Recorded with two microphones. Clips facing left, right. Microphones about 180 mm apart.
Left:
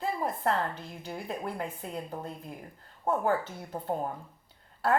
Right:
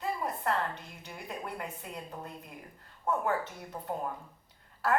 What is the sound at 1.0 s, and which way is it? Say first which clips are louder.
Speech: left 6 dB; 30° left (ahead or behind).